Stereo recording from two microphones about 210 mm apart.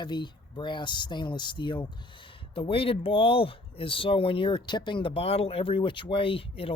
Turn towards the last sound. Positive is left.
turn(degrees=25)  # may be behind; listen again after turning